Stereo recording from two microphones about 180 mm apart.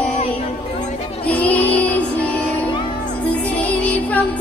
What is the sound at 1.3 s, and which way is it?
Music, 10° left (ahead or behind).